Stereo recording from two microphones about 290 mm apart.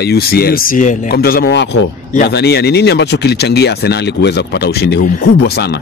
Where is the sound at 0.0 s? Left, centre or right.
Left.